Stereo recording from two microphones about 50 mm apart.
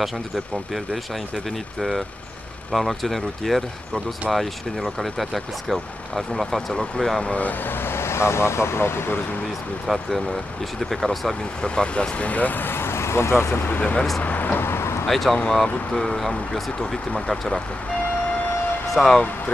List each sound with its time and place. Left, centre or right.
1.8 s speech: centre
6.7 s speech: centre
7.4 s speech: left
9.8 s speech: centre
11.6 s speech: centre; by 13.7 s left
13.7 s speech: left
14.2 s vehicle: left
15.0 s speech: centre
18.9 s speech: centre